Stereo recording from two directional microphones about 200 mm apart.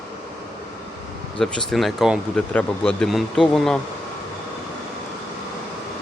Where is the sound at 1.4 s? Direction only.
Centre (ahead or behind).